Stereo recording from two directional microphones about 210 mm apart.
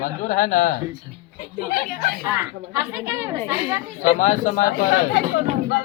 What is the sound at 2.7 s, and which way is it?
A woman's voice, 10° right (ahead or behind).